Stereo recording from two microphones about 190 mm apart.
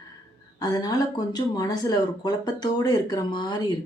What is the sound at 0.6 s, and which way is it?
Speech, 20° left (ahead or behind).